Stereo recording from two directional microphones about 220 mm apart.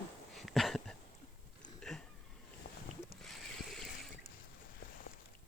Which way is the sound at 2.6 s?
55° left (ahead or behind).